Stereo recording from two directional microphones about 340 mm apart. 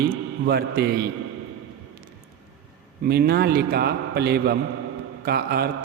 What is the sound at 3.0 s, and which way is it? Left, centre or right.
A man's voice, right.